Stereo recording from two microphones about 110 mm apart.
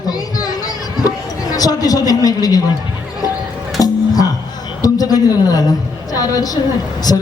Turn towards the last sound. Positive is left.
turn(degrees=35)  # may be behind; listen again after turning